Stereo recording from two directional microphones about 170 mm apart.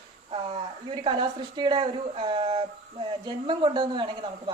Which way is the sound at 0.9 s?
30° right (ahead or behind).